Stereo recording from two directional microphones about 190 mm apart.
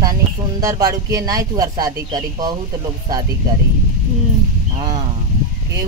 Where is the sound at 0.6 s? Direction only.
20° right (ahead or behind).